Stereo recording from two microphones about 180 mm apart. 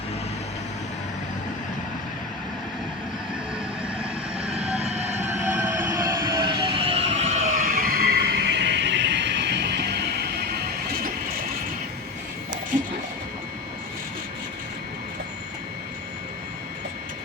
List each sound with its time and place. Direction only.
4.8 s train: 35° right (ahead or behind)
5.3 s train: 15° right (ahead or behind); by 10.0 s 70° right (ahead or behind)
12.7 s a sound: 45° right (ahead or behind)